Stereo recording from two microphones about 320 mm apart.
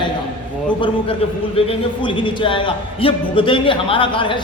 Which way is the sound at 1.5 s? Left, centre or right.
Centre.